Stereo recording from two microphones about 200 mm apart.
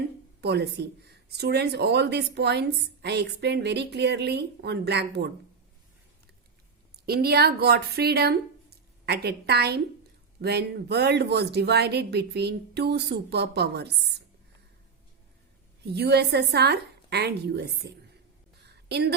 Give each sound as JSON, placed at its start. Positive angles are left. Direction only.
{"t": 0.4, "sound": "speech", "side_deg": -55}
{"t": 6.9, "sound": "speech", "side_deg": -50}
{"t": 15.8, "sound": "a woman's voice", "side_deg": -55}